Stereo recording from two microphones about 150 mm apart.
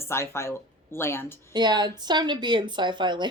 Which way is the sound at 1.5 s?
30° right (ahead or behind).